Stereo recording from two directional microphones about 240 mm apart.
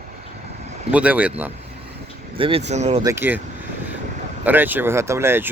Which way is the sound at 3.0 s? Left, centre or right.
Centre.